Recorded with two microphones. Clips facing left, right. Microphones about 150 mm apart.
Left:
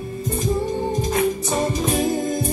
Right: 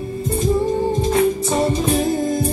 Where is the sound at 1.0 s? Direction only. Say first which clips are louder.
Right 4 dB; 30° right (ahead or behind).